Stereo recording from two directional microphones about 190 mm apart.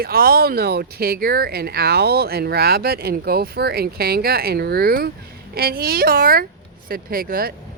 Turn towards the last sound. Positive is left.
turn(degrees=-50)  # may be behind; listen again after turning